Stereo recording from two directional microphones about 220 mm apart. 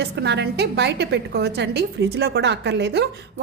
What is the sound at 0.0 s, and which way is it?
A woman's voice, 50° right (ahead or behind).